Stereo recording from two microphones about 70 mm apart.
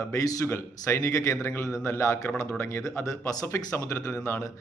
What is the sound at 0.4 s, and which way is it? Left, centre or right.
Speech, left.